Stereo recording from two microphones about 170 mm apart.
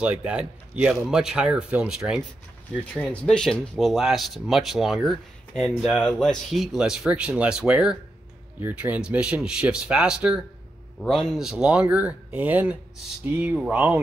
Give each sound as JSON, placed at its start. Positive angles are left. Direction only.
{"t": 0.0, "sound": "speech", "side_deg": -5}